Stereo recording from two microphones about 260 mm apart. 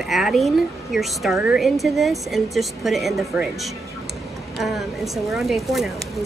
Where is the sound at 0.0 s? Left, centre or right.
Centre.